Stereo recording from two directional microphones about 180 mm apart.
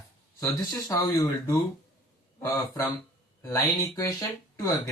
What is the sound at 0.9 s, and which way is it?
Speech, 20° left (ahead or behind).